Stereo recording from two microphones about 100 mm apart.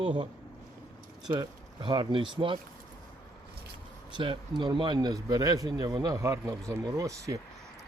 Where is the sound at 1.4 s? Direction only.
45° right (ahead or behind).